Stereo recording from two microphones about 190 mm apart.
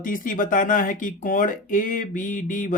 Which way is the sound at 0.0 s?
45° left (ahead or behind).